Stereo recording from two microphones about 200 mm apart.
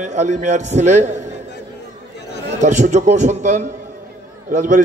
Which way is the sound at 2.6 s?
35° right (ahead or behind).